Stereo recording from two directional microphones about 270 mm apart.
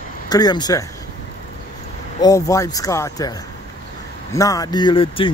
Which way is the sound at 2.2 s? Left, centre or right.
Centre.